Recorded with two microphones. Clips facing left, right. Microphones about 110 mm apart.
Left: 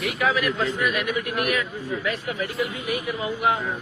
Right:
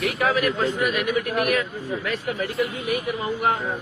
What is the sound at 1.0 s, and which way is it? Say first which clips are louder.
A man's voice: right 3 dB; 45° right (ahead or behind).